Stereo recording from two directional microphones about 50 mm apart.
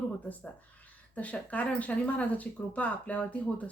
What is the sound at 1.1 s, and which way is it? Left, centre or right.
Speech, left.